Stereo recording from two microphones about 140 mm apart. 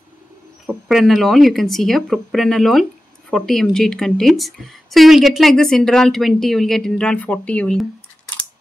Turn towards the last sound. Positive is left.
turn(degrees=10)  # may be behind; listen again after turning